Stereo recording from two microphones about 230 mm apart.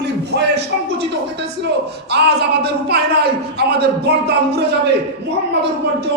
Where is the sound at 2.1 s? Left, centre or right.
Right.